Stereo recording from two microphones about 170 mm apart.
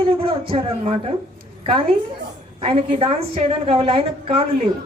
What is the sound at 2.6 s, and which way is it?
Speech, 35° right (ahead or behind).